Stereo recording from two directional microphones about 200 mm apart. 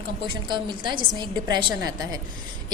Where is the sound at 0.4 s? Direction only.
20° right (ahead or behind).